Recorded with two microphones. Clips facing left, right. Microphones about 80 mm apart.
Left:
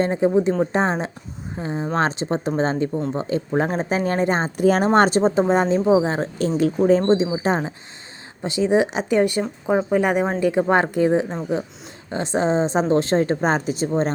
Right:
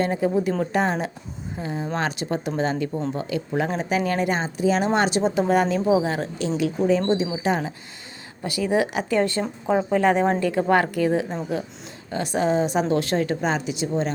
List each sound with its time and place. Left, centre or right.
0.0 s a woman's voice: left
2.9 s speech: centre
3.2 s a woman's voice: left